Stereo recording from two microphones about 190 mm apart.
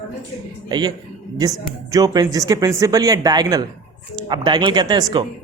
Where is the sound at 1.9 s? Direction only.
20° right (ahead or behind).